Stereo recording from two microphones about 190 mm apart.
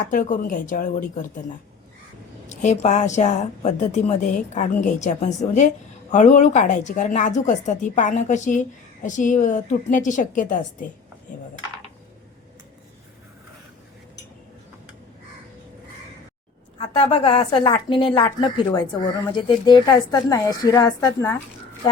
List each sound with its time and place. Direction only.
0.1 s a woman's voice: 45° left (ahead or behind)
2.5 s a woman's voice: 40° left (ahead or behind)
16.7 s a woman's voice: 30° left (ahead or behind); by 21.3 s 15° left (ahead or behind)